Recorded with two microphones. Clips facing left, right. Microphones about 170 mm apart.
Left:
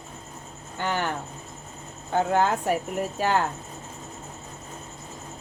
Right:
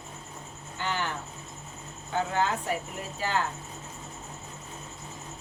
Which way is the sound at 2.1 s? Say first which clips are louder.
Left 6 dB; 50° left (ahead or behind).